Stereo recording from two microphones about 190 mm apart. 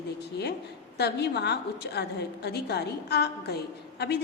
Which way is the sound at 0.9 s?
60° left (ahead or behind).